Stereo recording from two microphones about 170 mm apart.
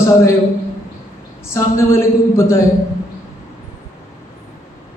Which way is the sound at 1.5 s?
15° left (ahead or behind).